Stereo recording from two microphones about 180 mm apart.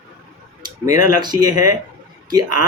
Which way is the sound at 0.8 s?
20° right (ahead or behind).